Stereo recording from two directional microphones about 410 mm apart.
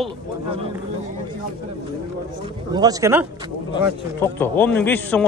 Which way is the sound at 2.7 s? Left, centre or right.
Centre.